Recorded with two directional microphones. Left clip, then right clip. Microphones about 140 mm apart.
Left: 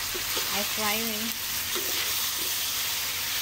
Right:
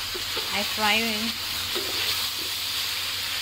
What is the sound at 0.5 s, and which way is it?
Speech, centre (ahead or behind).